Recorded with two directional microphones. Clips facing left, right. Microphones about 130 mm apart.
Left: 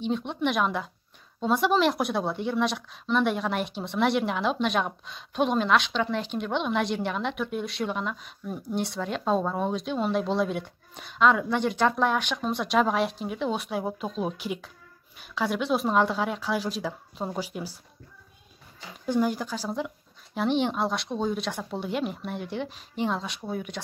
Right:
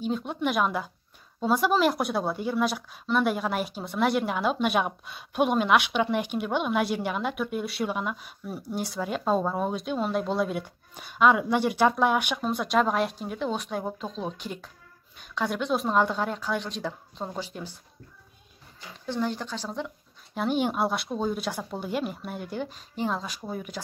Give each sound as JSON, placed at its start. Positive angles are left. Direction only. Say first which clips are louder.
{"t": 0.0, "sound": "a woman's voice", "louder": "left 1 dB", "side_deg": -5}
{"t": 19.0, "sound": "speech", "louder": "left 4 dB", "side_deg": 10}
{"t": 20.3, "sound": "a woman's voice", "louder": "left 1 dB", "side_deg": -5}